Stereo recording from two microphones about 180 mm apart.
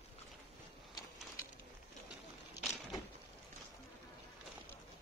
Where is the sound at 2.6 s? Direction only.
Centre (ahead or behind).